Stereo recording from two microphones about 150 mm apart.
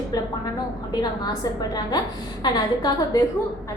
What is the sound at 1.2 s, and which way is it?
A woman's voice, 25° left (ahead or behind).